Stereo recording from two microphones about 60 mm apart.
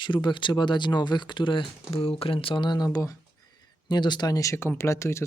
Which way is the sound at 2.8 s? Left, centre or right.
Left.